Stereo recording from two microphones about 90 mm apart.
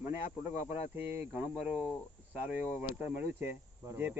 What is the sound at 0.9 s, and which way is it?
Speech, 25° right (ahead or behind).